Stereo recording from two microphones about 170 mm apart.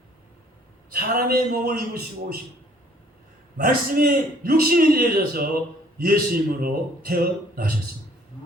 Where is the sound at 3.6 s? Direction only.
60° right (ahead or behind).